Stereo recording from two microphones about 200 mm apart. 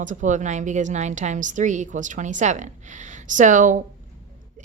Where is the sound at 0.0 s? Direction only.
40° right (ahead or behind).